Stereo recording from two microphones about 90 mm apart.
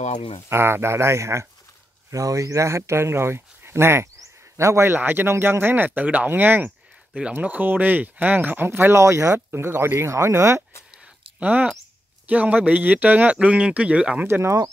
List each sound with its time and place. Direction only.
0.5 s speech: 25° right (ahead or behind)
11.3 s speech: 15° right (ahead or behind)
14.2 s speech: 30° right (ahead or behind)